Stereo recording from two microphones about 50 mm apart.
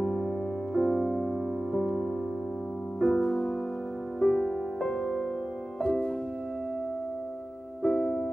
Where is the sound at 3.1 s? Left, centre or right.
Centre.